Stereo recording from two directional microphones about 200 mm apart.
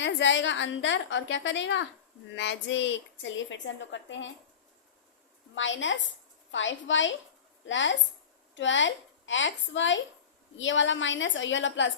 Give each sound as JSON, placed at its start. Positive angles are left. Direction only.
{"t": 0.0, "sound": "a woman's voice", "side_deg": 65}
{"t": 5.5, "sound": "a woman's voice", "side_deg": 70}